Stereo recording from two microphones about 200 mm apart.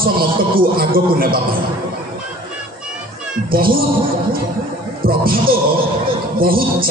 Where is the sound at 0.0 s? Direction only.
45° right (ahead or behind).